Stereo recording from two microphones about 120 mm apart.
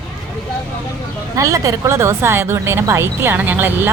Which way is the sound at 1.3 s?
30° right (ahead or behind).